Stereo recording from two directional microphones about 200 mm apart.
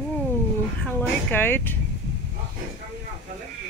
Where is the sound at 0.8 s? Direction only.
10° left (ahead or behind).